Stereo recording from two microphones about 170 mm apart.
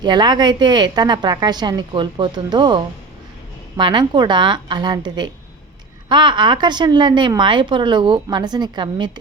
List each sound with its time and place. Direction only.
0.0 s a woman's voice: 25° right (ahead or behind)